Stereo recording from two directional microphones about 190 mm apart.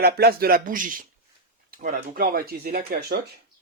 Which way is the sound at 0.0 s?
55° right (ahead or behind).